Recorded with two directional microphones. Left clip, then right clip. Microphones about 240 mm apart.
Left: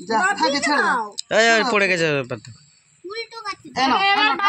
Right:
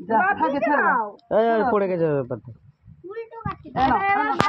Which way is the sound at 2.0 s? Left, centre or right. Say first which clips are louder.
Left 2 dB; left.